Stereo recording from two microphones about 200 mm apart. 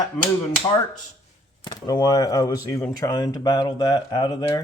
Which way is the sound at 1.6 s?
20° left (ahead or behind).